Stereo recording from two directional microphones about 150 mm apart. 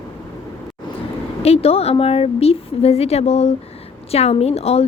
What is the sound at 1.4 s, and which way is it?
Speech, 40° left (ahead or behind).